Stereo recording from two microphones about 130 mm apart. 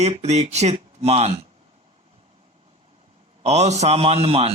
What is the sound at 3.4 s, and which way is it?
A man's voice, 60° right (ahead or behind).